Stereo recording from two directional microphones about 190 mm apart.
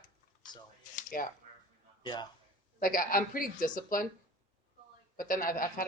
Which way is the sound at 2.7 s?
50° left (ahead or behind).